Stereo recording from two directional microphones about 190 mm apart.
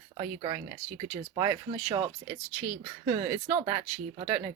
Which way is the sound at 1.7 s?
35° right (ahead or behind).